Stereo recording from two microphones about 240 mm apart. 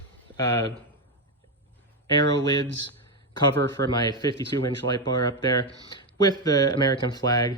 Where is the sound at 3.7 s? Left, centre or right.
Centre.